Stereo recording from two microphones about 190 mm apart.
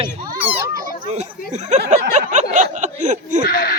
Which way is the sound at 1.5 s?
35° right (ahead or behind).